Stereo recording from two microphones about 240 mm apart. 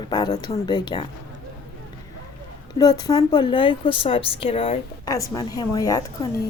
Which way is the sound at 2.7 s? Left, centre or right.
Centre.